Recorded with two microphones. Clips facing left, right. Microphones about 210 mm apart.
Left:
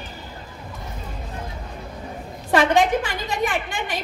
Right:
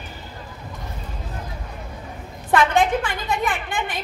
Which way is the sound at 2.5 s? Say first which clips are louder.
Left 1 dB; 55° right (ahead or behind).